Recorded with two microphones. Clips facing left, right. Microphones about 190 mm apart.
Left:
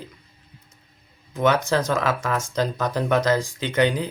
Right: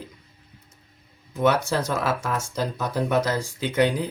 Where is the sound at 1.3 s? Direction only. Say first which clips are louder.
Left 1 dB; 5° right (ahead or behind).